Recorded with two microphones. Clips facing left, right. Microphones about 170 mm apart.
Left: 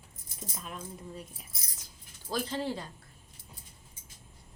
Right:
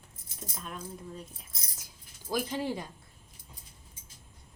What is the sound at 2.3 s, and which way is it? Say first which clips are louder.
Speech: right 1 dB; 10° right (ahead or behind).